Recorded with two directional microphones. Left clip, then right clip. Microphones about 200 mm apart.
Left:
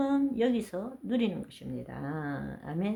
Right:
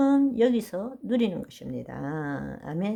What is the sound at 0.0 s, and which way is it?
Speech, 35° right (ahead or behind).